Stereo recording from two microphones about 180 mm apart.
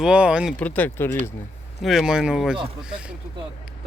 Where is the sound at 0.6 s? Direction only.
10° left (ahead or behind).